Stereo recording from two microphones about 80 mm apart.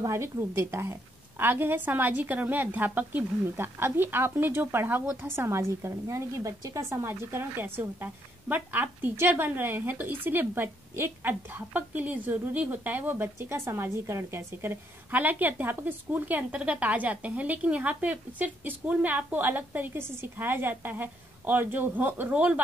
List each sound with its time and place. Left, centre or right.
0.0 s a woman's voice: right; by 22.6 s centre